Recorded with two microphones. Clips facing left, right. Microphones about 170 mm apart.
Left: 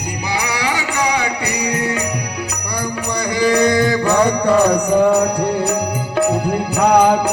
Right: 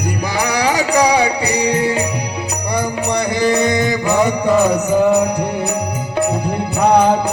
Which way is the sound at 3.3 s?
25° right (ahead or behind).